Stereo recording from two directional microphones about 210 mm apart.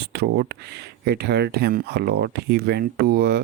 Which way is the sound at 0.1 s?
50° right (ahead or behind).